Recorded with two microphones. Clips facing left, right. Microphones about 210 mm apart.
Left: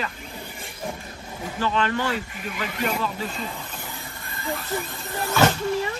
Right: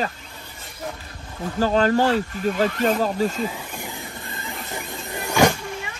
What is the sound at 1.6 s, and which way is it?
Speech, 40° right (ahead or behind).